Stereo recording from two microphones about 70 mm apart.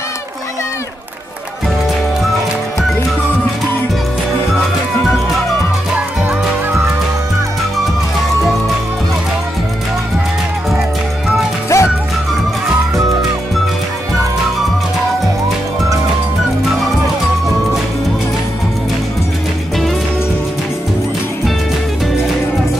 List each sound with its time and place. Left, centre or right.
11.7 s music: left